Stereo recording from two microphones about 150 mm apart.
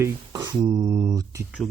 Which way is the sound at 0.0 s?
25° right (ahead or behind).